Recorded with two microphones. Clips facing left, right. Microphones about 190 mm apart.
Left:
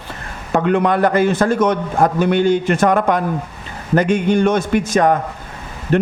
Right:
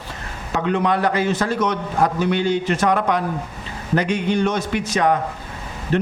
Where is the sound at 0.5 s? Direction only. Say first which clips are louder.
Left 5 dB; 55° left (ahead or behind).